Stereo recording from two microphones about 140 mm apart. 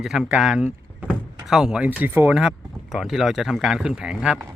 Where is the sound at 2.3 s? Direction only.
5° right (ahead or behind).